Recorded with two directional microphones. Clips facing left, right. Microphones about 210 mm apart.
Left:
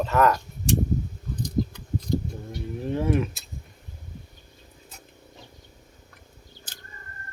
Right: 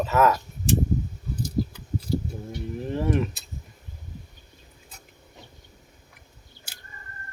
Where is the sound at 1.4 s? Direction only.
5° right (ahead or behind).